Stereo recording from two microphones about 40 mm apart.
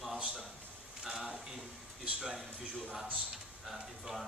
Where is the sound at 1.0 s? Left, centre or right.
Centre.